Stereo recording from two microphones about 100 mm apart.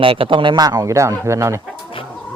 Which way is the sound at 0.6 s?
35° right (ahead or behind).